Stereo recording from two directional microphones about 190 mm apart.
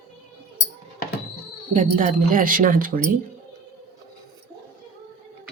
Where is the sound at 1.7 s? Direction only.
45° right (ahead or behind).